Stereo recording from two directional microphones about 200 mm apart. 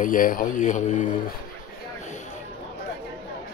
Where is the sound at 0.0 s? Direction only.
45° left (ahead or behind).